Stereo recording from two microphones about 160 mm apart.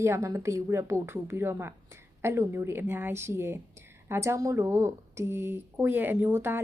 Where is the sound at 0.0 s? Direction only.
20° right (ahead or behind).